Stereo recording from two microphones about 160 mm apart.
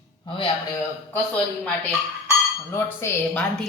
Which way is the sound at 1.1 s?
10° left (ahead or behind).